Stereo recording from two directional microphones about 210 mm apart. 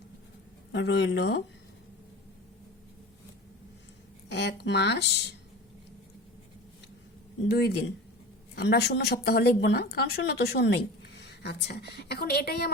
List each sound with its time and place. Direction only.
0.7 s speech: 55° left (ahead or behind)
4.3 s speech: 55° left (ahead or behind)
7.4 s speech: 50° left (ahead or behind)